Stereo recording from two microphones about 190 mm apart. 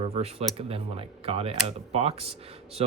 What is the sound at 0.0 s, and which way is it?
Speech, 30° right (ahead or behind).